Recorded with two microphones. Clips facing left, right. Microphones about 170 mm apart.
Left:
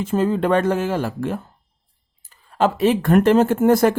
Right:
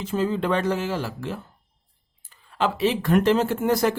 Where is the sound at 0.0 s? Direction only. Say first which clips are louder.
Left 5 dB; 50° left (ahead or behind).